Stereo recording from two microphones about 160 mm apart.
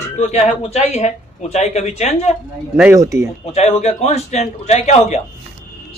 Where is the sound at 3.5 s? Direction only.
45° left (ahead or behind).